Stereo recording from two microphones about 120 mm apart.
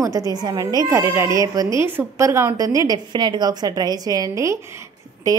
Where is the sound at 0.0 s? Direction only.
30° right (ahead or behind).